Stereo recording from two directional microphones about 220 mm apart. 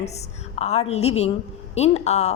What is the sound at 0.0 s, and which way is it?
Speech, 30° left (ahead or behind).